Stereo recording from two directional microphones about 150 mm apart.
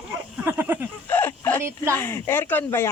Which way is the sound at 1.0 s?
15° left (ahead or behind).